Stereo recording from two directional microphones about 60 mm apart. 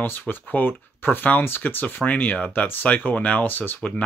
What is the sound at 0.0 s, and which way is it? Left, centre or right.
Speech, left.